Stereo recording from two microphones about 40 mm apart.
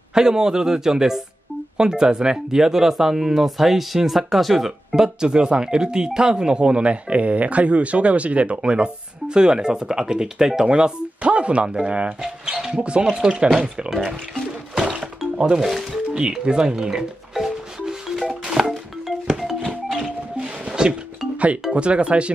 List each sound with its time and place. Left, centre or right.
0.1 s speech: centre
10.7 s speech: right
11.6 s speech: right
14.9 s music: right
15.6 s speech: centre
16.1 s speech: right
16.8 s music: centre
21.7 s speech: right